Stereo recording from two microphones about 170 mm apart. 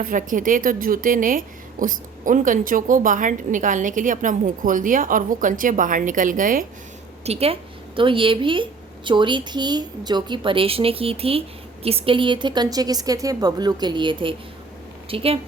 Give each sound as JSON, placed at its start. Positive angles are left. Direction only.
{"t": 0.0, "sound": "a woman's voice", "side_deg": -50}
{"t": 7.3, "sound": "a woman's voice", "side_deg": -35}